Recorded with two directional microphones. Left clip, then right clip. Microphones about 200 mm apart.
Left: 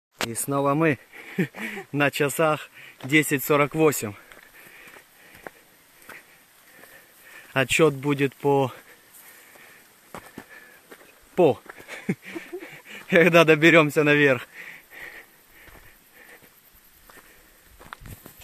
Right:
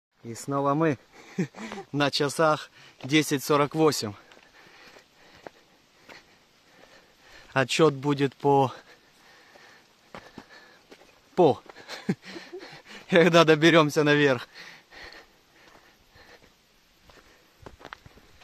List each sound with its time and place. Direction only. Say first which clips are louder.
0.3 s speech: left 2 dB; centre (ahead or behind); by 4.2 s 15° right (ahead or behind)
7.5 s speech: left 2 dB; 20° right (ahead or behind)
11.3 s speech: left 1 dB; 20° right (ahead or behind)
11.9 s a sound: left 2 dB; 25° right (ahead or behind)